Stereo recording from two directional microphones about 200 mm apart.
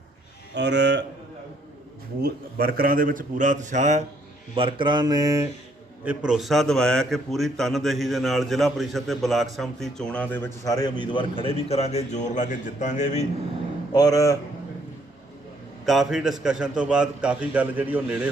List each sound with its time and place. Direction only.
0.5 s speech: 60° right (ahead or behind)
2.2 s a man's voice: 50° right (ahead or behind)
4.5 s speech: 25° right (ahead or behind)
6.1 s a man's voice: 5° right (ahead or behind); by 13.2 s 35° left (ahead or behind)
13.9 s speech: 15° left (ahead or behind)
15.9 s a man's voice: centre (ahead or behind)